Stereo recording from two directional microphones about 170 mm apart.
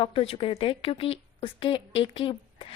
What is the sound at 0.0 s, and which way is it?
A woman's voice, 30° left (ahead or behind).